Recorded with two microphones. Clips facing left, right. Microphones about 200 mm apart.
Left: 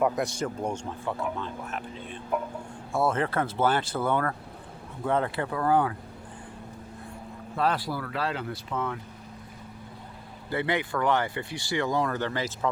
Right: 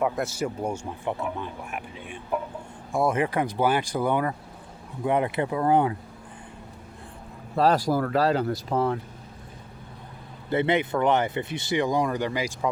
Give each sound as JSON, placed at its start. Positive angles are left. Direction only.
{"t": 0.0, "sound": "speech", "side_deg": -5}
{"t": 7.5, "sound": "speech", "side_deg": -40}
{"t": 10.5, "sound": "speech", "side_deg": -20}